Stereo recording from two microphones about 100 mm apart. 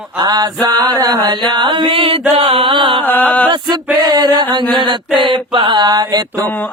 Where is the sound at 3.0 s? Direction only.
20° left (ahead or behind).